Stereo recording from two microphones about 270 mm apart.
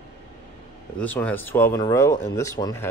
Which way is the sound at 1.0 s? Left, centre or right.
Centre.